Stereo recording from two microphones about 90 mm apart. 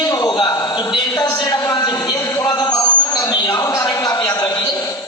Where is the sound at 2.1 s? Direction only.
35° left (ahead or behind).